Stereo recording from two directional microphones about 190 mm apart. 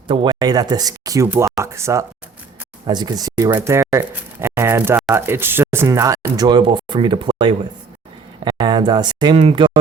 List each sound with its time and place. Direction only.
0.1 s speech: 25° right (ahead or behind)